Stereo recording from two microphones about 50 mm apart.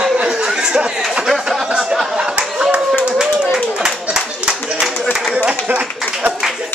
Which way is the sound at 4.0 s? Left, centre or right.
Centre.